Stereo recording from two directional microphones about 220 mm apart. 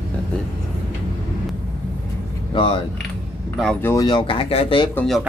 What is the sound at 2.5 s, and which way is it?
Speech, 20° left (ahead or behind).